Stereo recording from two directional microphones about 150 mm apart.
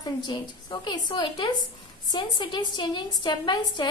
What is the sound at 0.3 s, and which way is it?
A woman's voice, 30° left (ahead or behind).